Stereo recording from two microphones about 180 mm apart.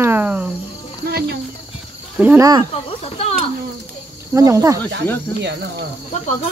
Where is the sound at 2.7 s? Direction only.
30° left (ahead or behind).